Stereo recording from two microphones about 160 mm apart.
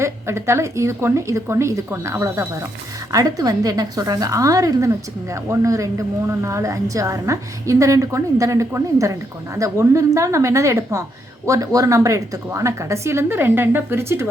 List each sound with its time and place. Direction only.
0.0 s a woman's voice: 15° right (ahead or behind)